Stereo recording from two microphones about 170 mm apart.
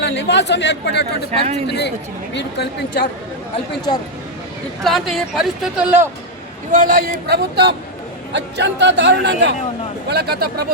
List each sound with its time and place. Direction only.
0.0 s speech: 90° left
1.3 s speech: 40° right (ahead or behind)
1.6 s speech: 85° left
4.8 s speech: centre (ahead or behind)
6.7 s a man's voice: 50° right (ahead or behind); by 7.8 s 70° right (ahead or behind)
8.3 s a man's voice: 90° right
10.1 s speech: 70° right (ahead or behind)